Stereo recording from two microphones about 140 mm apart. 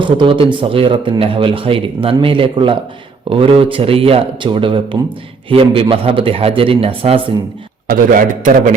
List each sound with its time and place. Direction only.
0.0 s a man's voice: 40° right (ahead or behind)
8.1 s a man's voice: 75° right (ahead or behind)